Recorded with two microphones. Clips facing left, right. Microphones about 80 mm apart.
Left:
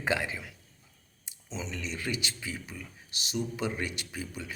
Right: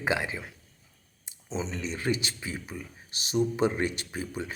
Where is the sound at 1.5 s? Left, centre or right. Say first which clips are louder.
Right 5 dB; right.